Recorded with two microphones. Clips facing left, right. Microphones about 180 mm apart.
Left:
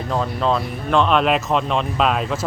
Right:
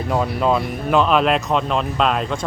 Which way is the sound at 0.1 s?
10° right (ahead or behind).